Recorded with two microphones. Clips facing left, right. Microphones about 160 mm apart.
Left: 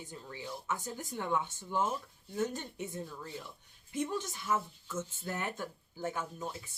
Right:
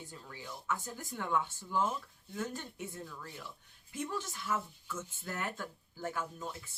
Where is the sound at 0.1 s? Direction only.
20° left (ahead or behind).